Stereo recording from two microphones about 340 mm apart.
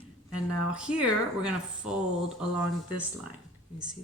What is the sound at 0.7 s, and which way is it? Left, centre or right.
Speech, centre.